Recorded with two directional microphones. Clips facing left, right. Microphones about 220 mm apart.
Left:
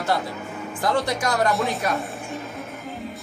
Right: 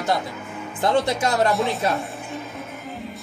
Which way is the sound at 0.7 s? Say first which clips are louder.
Right 3 dB; 25° right (ahead or behind).